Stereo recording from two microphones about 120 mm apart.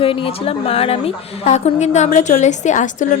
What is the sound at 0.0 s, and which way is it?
A woman's voice, 50° left (ahead or behind).